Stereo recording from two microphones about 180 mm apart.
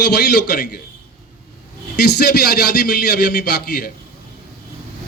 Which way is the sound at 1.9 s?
60° left (ahead or behind).